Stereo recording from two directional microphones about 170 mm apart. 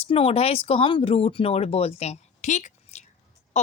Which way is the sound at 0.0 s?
35° left (ahead or behind).